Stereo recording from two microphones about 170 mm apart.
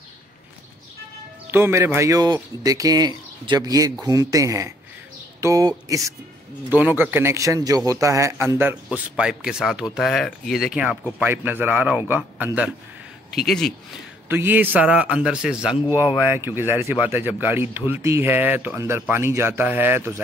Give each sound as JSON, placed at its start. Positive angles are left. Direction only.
{"t": 1.5, "sound": "speech", "side_deg": -15}
{"t": 13.5, "sound": "speech", "side_deg": 5}
{"t": 14.3, "sound": "speech", "side_deg": -10}